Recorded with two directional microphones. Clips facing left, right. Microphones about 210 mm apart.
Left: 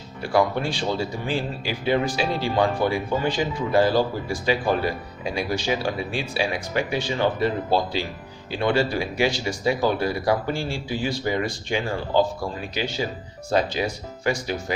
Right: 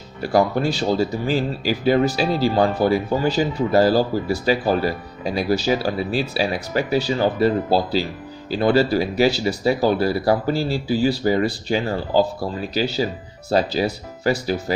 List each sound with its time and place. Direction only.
0.2 s speech: 40° right (ahead or behind)